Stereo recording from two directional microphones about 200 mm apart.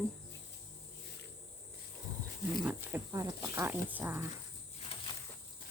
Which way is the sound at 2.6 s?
10° right (ahead or behind).